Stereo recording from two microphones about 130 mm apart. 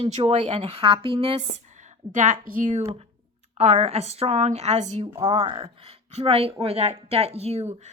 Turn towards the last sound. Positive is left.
turn(degrees=-55)  # may be behind; listen again after turning